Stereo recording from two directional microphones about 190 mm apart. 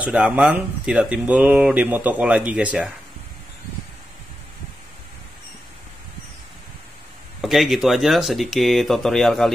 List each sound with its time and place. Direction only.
0.0 s speech: 5° right (ahead or behind)
7.4 s speech: centre (ahead or behind)